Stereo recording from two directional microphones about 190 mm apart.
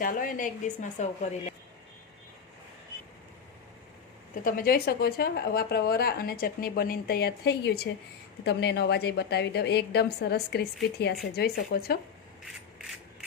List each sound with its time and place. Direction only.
0.0 s a woman's voice: 45° left (ahead or behind)
4.4 s a woman's voice: 50° left (ahead or behind)